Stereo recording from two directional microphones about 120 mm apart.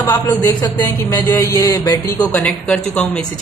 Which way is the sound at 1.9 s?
20° left (ahead or behind).